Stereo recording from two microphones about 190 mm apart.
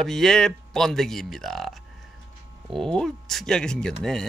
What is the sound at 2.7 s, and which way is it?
Speech, centre (ahead or behind).